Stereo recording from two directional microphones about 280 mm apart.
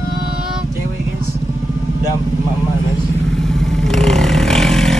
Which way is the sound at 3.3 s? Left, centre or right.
Centre.